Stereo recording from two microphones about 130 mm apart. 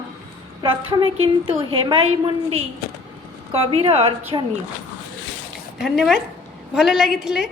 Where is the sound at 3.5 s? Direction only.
50° right (ahead or behind).